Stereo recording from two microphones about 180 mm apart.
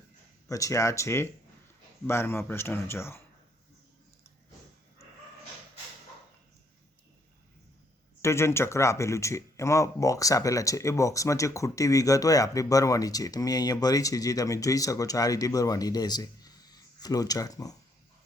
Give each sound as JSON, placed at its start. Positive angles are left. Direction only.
{"t": 0.4, "sound": "speech", "side_deg": 20}
{"t": 8.2, "sound": "speech", "side_deg": 15}